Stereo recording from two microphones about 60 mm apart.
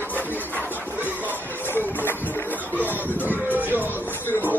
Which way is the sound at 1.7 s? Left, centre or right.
Left.